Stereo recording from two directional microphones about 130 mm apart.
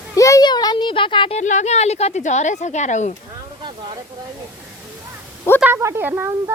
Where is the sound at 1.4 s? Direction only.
65° left (ahead or behind).